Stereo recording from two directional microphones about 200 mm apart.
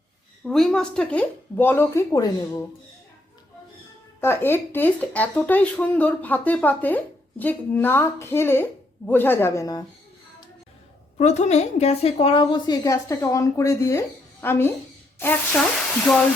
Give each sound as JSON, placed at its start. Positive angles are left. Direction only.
{"t": 0.4, "sound": "speech", "side_deg": 0}
{"t": 4.2, "sound": "speech", "side_deg": 10}
{"t": 11.2, "sound": "a woman's voice", "side_deg": 35}